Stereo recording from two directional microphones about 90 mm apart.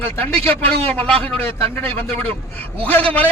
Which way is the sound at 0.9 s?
15° left (ahead or behind).